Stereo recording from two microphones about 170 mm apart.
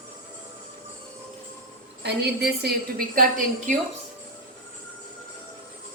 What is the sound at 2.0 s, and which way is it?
Speech, 70° right (ahead or behind).